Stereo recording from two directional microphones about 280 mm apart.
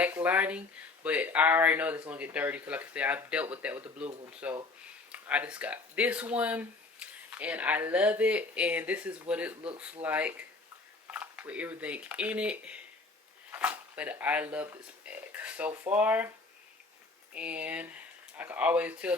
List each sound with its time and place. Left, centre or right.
0.0 s a sound: centre
1.0 s speech: centre
17.3 s speech: centre